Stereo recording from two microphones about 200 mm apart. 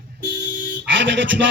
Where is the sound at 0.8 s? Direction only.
65° right (ahead or behind).